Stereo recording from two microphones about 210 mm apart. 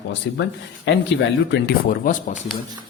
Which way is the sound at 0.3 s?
60° left (ahead or behind).